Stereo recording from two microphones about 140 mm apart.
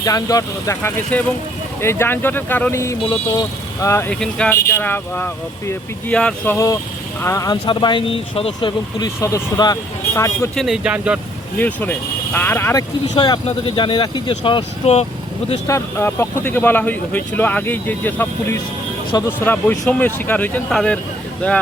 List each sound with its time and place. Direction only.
0.0 s speech: 25° left (ahead or behind)
4.1 s speech: 5° left (ahead or behind); by 8.7 s 40° left (ahead or behind)
9.0 s speech: 25° left (ahead or behind)
10.5 s speech: 5° left (ahead or behind)
10.8 s speech: 10° right (ahead or behind)
11.5 s speech: 10° left (ahead or behind)
13.1 s speech: 35° left (ahead or behind)
15.6 s speech: 20° left (ahead or behind)
19.1 s speech: 25° left (ahead or behind)
19.8 s speech: 10° left (ahead or behind)